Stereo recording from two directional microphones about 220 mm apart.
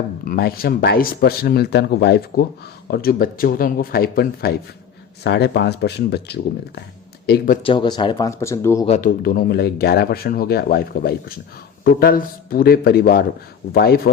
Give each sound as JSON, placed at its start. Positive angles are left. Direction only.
{"t": 0.3, "sound": "speech", "side_deg": 45}
{"t": 7.6, "sound": "speech", "side_deg": 20}
{"t": 8.9, "sound": "speech", "side_deg": 40}